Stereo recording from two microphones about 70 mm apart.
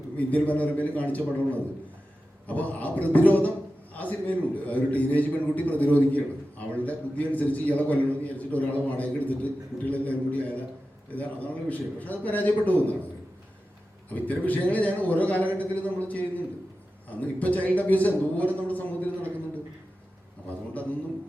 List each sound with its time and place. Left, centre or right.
0.2 s a man's voice: left
14.1 s a man's voice: left